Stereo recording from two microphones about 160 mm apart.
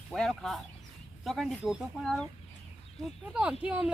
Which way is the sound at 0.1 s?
Centre (ahead or behind).